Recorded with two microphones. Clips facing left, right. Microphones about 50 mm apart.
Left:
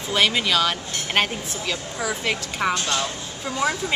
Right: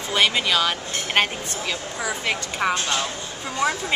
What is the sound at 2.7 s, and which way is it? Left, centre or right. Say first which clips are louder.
Speech: left 1 dB; centre.